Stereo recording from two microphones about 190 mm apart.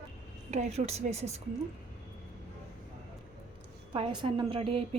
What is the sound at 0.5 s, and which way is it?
Speech, 35° right (ahead or behind).